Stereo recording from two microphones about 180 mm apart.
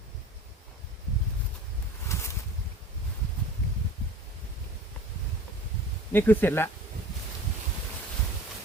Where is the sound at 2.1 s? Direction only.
15° left (ahead or behind).